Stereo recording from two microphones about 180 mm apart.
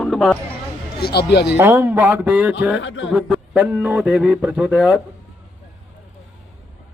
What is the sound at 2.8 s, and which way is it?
Speech, 90° left.